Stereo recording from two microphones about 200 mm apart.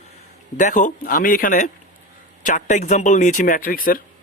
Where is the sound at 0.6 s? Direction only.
40° left (ahead or behind).